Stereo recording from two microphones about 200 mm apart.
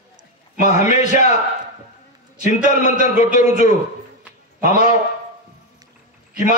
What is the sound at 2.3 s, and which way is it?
A man's voice, 35° left (ahead or behind).